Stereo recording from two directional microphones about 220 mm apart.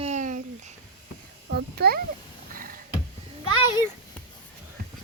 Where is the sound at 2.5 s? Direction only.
40° right (ahead or behind).